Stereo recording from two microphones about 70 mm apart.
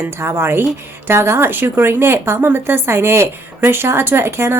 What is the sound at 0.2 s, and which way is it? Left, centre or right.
A woman's voice, right.